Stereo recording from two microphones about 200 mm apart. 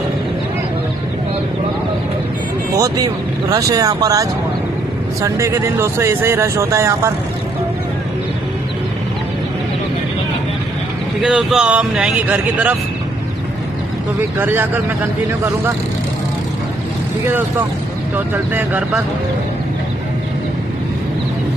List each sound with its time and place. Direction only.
2.8 s speech: 15° right (ahead or behind)
11.2 s speech: 5° right (ahead or behind)
14.4 s speech: 10° right (ahead or behind)
18.5 s speech: 10° right (ahead or behind)